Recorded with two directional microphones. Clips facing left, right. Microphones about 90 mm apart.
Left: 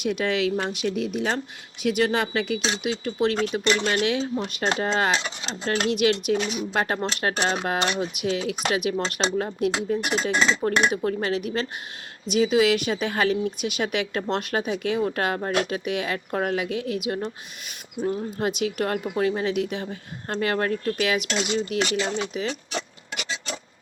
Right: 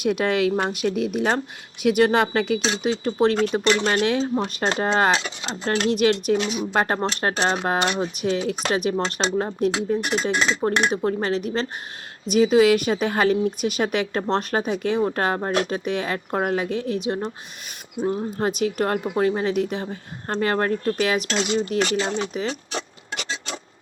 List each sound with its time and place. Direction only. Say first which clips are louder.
0.0 s a woman's voice: right 3 dB; 50° right (ahead or behind)
2.2 s speech: right 4 dB; 40° right (ahead or behind)